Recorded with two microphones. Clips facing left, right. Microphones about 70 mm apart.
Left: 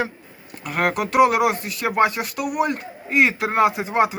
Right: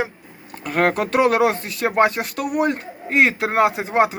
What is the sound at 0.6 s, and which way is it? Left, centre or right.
Speech, right.